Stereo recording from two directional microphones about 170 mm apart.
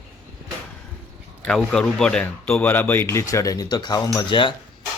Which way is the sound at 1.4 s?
5° left (ahead or behind).